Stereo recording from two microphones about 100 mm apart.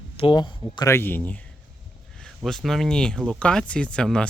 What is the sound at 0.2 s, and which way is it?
Speech, 55° left (ahead or behind).